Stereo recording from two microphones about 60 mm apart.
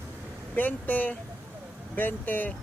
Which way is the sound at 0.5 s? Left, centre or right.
Left.